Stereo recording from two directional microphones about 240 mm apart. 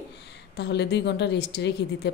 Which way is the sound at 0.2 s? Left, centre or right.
Left.